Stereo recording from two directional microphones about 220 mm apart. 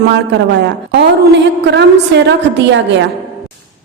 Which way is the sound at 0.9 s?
50° right (ahead or behind).